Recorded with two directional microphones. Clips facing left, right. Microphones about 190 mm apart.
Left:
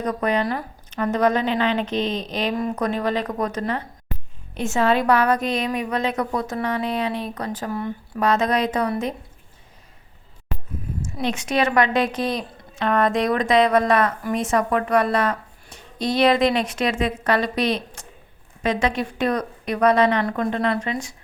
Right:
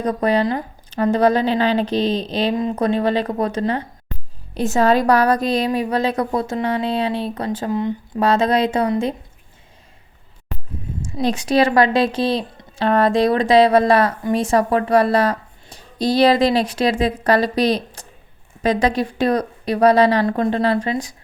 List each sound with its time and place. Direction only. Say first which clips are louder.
0.0 s a woman's voice: right 4 dB; 30° right (ahead or behind)
11.0 s speech: right 5 dB; 35° right (ahead or behind)